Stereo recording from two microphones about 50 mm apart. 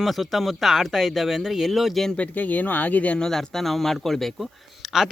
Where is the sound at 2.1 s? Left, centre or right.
Left.